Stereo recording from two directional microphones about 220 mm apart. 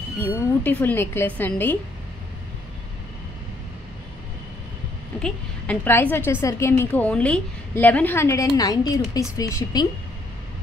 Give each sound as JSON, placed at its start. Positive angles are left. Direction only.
{"t": 0.2, "sound": "a woman's voice", "side_deg": 10}
{"t": 5.2, "sound": "a woman's voice", "side_deg": 10}